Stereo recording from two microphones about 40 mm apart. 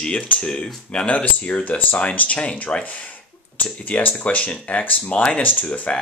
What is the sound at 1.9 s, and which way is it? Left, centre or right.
Speech, left.